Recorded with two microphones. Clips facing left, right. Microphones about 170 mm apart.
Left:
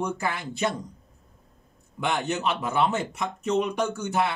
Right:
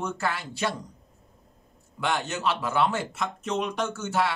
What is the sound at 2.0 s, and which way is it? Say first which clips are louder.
Speech: left 1 dB; 15° left (ahead or behind).